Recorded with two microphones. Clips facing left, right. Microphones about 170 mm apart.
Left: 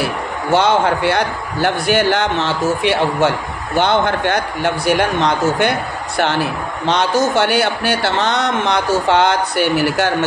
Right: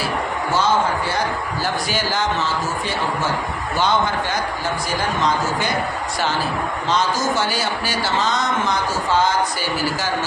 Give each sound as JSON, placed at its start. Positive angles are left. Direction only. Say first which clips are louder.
{"t": 0.0, "sound": "a man's voice", "louder": "left 2 dB", "side_deg": 70}